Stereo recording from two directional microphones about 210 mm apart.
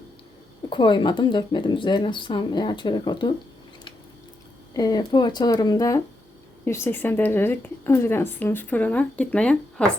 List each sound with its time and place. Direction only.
0.7 s speech: 20° left (ahead or behind)
4.7 s a woman's voice: 15° left (ahead or behind)